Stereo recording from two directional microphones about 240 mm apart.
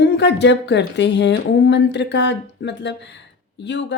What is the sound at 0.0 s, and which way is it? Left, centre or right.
A woman's voice, left.